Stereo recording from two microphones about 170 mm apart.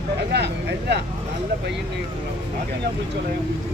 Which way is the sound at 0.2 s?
80° right.